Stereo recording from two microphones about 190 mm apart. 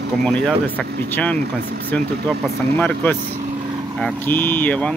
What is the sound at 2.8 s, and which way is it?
Speech, 10° left (ahead or behind).